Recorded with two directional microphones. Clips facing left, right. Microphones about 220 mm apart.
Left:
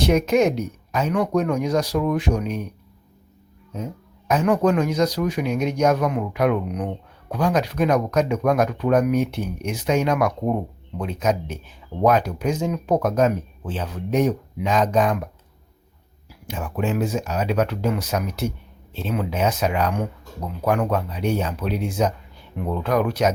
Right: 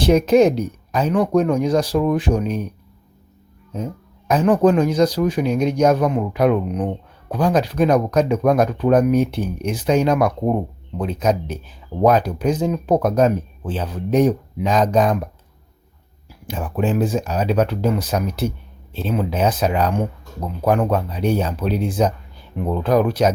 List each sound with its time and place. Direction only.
0.0 s speech: 30° right (ahead or behind)
4.3 s speech: 35° right (ahead or behind)
16.5 s speech: 35° right (ahead or behind)